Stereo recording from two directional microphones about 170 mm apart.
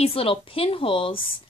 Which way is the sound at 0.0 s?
35° left (ahead or behind).